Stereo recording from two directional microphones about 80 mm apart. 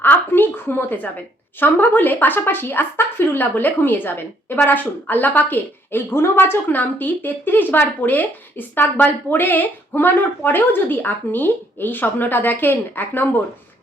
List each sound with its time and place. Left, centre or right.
0.0 s speech: left